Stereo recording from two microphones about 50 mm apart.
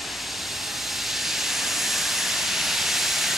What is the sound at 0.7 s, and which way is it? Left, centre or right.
Steam, centre.